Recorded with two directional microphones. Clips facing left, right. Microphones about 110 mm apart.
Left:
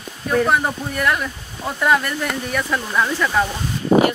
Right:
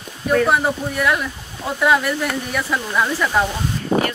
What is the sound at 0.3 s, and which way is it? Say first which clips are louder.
Speech: right 1 dB; centre (ahead or behind).